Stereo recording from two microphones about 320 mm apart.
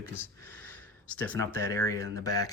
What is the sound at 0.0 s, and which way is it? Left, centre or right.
Speech, centre.